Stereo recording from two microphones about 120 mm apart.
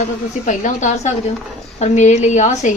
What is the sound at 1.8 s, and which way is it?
Speech, 75° left (ahead or behind).